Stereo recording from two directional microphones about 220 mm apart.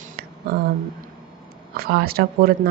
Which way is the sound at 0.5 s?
45° right (ahead or behind).